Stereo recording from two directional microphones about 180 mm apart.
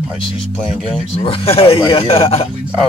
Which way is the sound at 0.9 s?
30° left (ahead or behind).